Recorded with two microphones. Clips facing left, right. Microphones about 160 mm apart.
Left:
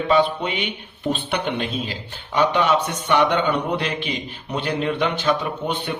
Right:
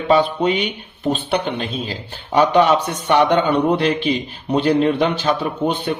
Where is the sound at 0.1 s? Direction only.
35° right (ahead or behind).